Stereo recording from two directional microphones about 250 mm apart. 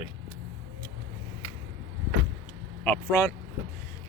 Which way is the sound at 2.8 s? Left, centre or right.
Centre.